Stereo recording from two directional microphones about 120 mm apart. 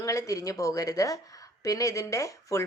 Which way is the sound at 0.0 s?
25° left (ahead or behind).